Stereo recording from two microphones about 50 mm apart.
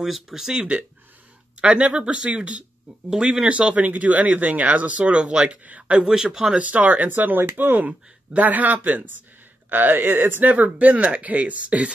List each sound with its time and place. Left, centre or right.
0.0 s speech: centre
1.6 s speech: right
3.1 s speech: centre; by 5.1 s right
5.1 s speech: centre
6.6 s speech: right
10.4 s speech: right